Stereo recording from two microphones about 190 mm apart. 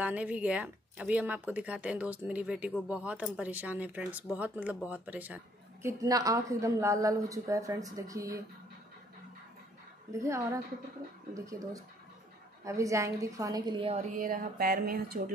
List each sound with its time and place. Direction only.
0.0 s speech: 5° right (ahead or behind)
10.1 s speech: 15° right (ahead or behind)
14.1 s a sound: 45° right (ahead or behind)